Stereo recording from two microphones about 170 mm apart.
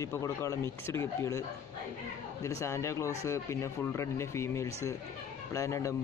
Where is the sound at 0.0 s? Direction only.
15° left (ahead or behind).